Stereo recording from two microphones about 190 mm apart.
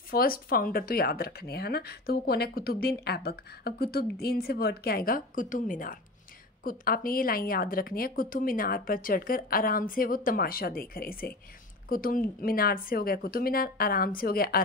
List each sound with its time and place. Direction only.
0.1 s speech: 50° left (ahead or behind)